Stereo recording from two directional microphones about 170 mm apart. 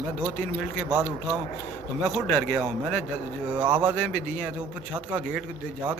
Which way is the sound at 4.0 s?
Centre (ahead or behind).